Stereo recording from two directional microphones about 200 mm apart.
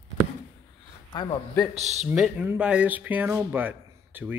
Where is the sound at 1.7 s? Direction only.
35° right (ahead or behind).